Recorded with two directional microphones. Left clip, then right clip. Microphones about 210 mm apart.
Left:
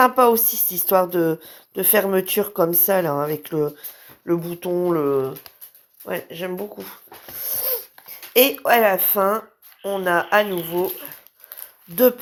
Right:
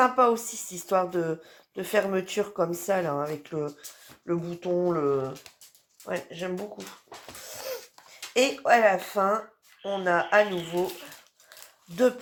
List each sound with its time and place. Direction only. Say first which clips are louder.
0.0 s a woman's voice: left 6 dB; 45° left (ahead or behind)
7.4 s babbling: left 6 dB; 45° left (ahead or behind)
8.3 s a woman's voice: left 5 dB; 45° left (ahead or behind)